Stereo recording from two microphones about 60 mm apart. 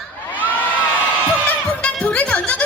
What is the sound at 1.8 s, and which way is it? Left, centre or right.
Music, centre.